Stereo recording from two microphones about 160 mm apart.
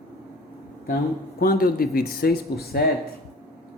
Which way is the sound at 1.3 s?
65° left (ahead or behind).